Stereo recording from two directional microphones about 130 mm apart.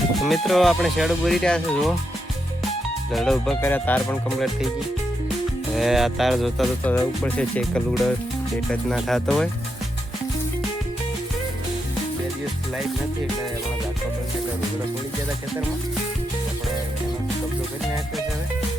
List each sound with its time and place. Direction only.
0.2 s speech: centre (ahead or behind)
3.1 s speech: centre (ahead or behind)
3.6 s speech: 15° left (ahead or behind)
4.4 s speech: centre (ahead or behind)
5.7 s speech: centre (ahead or behind)
6.8 s speech: 20° left (ahead or behind)
7.2 s speech: 5° left (ahead or behind)